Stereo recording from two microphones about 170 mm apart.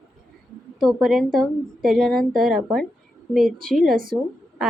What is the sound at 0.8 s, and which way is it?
A woman's voice, centre (ahead or behind).